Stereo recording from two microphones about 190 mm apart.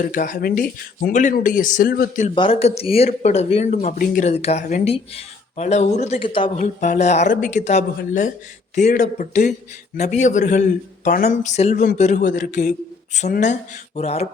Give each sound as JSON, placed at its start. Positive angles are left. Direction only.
{"t": 0.0, "sound": "speech", "side_deg": 45}
{"t": 2.3, "sound": "speech", "side_deg": 30}
{"t": 6.6, "sound": "speech", "side_deg": 40}
{"t": 8.9, "sound": "speech", "side_deg": 40}